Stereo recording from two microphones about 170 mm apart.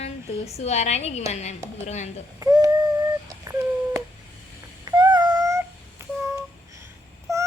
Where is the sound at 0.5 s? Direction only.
40° left (ahead or behind).